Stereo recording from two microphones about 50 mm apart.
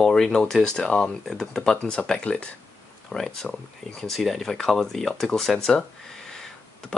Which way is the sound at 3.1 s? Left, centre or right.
Centre.